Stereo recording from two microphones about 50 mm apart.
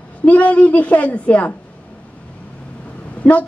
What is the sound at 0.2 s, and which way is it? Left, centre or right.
A woman's voice, left.